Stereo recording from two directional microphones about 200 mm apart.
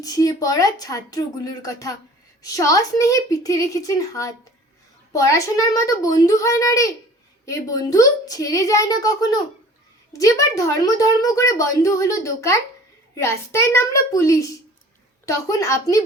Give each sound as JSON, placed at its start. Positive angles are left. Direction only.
{"t": 0.0, "sound": "speech", "side_deg": 15}